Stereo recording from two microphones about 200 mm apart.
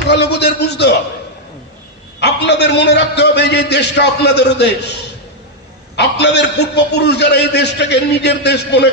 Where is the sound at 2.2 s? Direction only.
60° left (ahead or behind).